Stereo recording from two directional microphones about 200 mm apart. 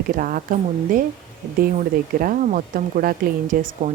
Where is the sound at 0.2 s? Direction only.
45° right (ahead or behind).